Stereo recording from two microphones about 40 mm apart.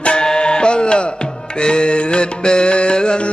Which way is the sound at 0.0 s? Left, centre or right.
Left.